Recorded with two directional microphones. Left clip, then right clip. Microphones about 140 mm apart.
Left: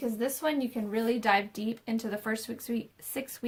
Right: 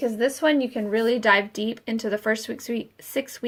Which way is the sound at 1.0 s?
25° left (ahead or behind).